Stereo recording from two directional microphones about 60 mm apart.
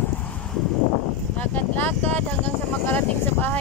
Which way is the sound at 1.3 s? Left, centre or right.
Left.